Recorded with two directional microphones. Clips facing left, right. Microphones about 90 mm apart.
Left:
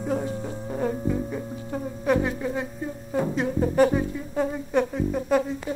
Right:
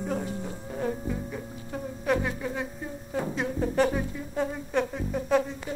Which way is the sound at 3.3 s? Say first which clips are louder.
Left 5 dB; 5° left (ahead or behind).